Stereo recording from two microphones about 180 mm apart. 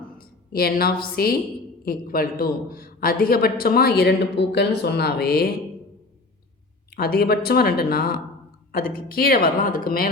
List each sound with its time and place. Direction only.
0.2 s a woman's voice: 55° left (ahead or behind)
6.9 s a man's voice: 60° left (ahead or behind)